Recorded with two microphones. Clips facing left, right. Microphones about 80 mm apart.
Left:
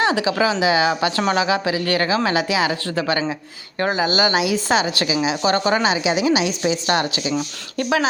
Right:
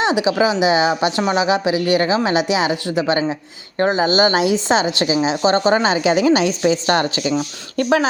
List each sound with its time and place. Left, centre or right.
0.0 s a woman's voice: right